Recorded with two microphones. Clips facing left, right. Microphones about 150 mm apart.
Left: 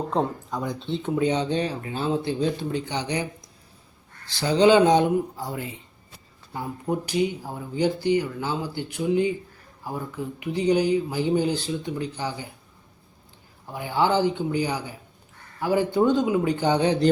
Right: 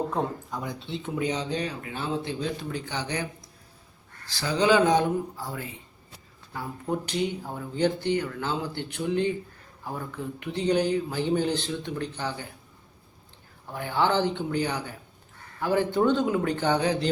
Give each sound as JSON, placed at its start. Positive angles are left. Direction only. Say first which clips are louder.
{"t": 0.1, "sound": "speech", "louder": "left 4 dB", "side_deg": 20}
{"t": 4.3, "sound": "speech", "louder": "left 5 dB", "side_deg": 25}
{"t": 7.0, "sound": "speech", "louder": "left 4 dB", "side_deg": 10}
{"t": 10.4, "sound": "speech", "louder": "left 3 dB", "side_deg": 10}
{"t": 13.7, "sound": "speech", "louder": "left 2 dB", "side_deg": 10}